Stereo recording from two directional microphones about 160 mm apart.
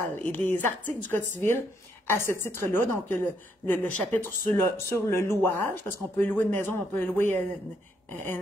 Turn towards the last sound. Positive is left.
turn(degrees=15)  # may be behind; listen again after turning